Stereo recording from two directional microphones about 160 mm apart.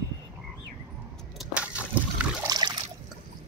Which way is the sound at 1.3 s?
5° right (ahead or behind).